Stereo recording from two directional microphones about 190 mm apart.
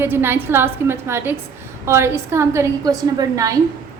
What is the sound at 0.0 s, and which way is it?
A woman's voice, 10° right (ahead or behind).